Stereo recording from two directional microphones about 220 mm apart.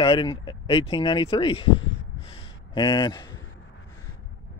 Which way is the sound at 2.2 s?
20° left (ahead or behind).